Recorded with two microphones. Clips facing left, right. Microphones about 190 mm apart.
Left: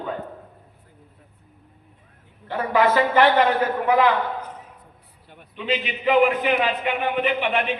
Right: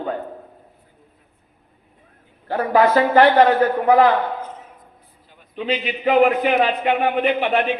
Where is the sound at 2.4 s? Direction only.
40° right (ahead or behind).